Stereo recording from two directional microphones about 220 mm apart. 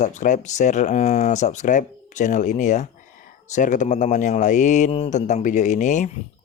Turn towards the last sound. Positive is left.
turn(degrees=35)  # may be behind; listen again after turning